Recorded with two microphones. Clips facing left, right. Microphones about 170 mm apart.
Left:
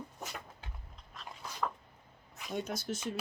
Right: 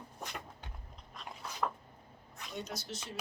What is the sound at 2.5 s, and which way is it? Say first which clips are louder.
Speech: left 6 dB; 50° left (ahead or behind).